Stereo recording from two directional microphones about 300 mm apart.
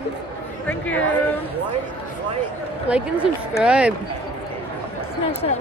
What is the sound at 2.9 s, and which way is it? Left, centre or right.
Speech, centre.